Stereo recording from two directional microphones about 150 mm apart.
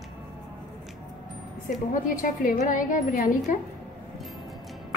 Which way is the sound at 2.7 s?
60° left (ahead or behind).